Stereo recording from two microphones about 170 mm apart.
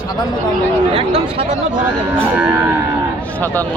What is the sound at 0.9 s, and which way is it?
Speech, 35° right (ahead or behind).